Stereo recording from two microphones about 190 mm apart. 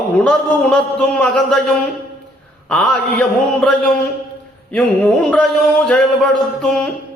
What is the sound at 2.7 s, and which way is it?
A man's voice, 5° left (ahead or behind).